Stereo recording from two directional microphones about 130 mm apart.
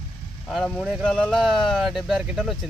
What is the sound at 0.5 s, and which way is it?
Speech, 5° left (ahead or behind).